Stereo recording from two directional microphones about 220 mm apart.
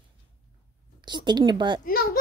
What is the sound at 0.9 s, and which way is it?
Speech, 20° right (ahead or behind).